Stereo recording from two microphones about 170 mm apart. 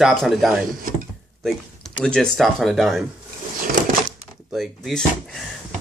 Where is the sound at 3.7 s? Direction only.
55° right (ahead or behind).